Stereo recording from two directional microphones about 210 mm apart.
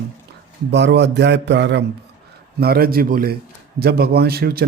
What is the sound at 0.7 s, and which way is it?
A man's voice, 55° right (ahead or behind).